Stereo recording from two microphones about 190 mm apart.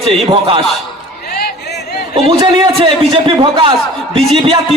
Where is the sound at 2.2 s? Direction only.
25° right (ahead or behind).